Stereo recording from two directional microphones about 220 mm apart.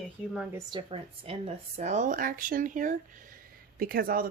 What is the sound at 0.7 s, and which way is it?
Speech, 25° right (ahead or behind).